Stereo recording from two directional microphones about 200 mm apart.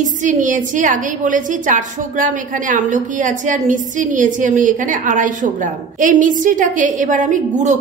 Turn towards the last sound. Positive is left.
turn(degrees=-40)  # may be behind; listen again after turning